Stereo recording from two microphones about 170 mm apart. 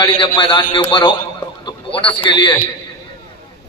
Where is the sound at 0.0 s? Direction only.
30° left (ahead or behind).